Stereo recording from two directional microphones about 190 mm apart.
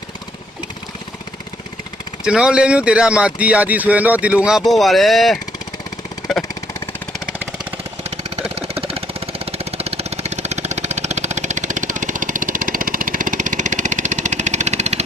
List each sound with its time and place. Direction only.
2.2 s speech: 5° right (ahead or behind)
7.3 s a sound: 5° right (ahead or behind)
8.5 s engine: 30° right (ahead or behind)